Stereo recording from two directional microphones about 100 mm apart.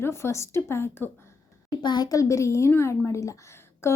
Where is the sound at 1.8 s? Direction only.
45° left (ahead or behind).